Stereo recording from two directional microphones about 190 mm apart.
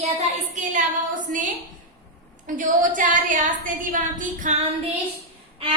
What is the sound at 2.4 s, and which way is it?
A woman's voice, 45° right (ahead or behind).